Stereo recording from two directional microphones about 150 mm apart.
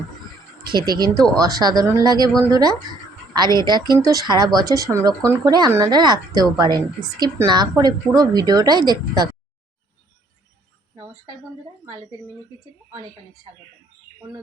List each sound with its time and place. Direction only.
0.6 s speech: 30° right (ahead or behind)